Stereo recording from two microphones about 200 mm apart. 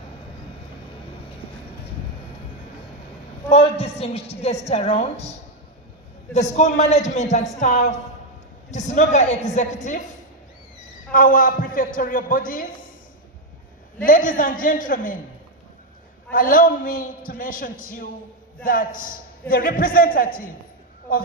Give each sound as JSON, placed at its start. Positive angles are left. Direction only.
{"t": 3.5, "sound": "a woman's voice", "side_deg": 30}
{"t": 6.3, "sound": "a woman's voice", "side_deg": 35}
{"t": 11.1, "sound": "a man's voice", "side_deg": 45}
{"t": 14.0, "sound": "a man's voice", "side_deg": 40}
{"t": 16.3, "sound": "a man's voice", "side_deg": 45}